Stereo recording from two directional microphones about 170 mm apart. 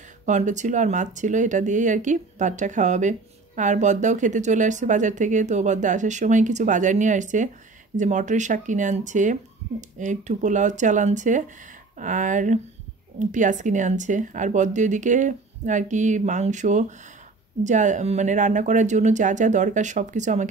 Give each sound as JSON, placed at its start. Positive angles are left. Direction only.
{"t": 0.2, "sound": "speech", "side_deg": -45}